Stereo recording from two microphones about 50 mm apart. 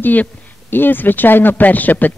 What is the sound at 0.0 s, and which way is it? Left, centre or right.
Speech, left.